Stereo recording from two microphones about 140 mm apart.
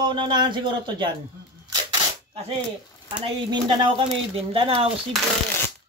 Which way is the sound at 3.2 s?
40° right (ahead or behind).